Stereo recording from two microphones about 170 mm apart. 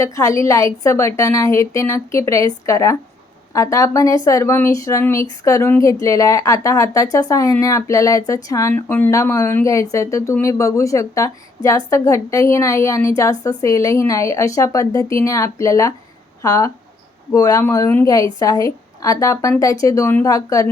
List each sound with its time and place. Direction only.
0.0 s a woman's voice: 20° left (ahead or behind)